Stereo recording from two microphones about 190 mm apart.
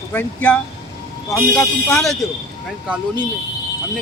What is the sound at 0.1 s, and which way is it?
Speech, 10° left (ahead or behind).